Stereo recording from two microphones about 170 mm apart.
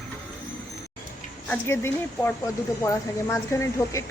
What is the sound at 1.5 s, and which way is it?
A woman's voice, 15° left (ahead or behind).